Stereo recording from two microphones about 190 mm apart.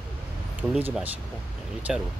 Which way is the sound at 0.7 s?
10° right (ahead or behind).